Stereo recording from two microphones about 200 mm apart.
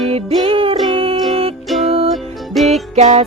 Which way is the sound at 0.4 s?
25° right (ahead or behind).